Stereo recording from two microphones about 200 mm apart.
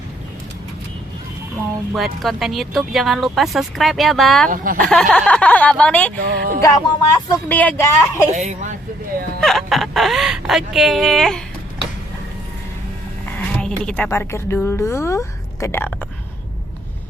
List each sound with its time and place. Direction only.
2.0 s speech: centre (ahead or behind)
4.4 s speech: 45° right (ahead or behind)
4.8 s speech: centre (ahead or behind)
6.1 s speech: 45° right (ahead or behind)
6.6 s a woman's voice: 15° left (ahead or behind)
8.3 s a woman's voice: 35° right (ahead or behind)
9.4 s speech: centre (ahead or behind)
13.6 s a woman's voice: 5° left (ahead or behind)